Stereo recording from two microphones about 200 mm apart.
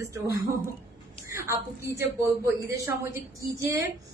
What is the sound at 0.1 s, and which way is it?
Speech, 15° right (ahead or behind).